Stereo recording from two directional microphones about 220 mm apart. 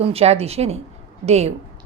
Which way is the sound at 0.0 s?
25° right (ahead or behind).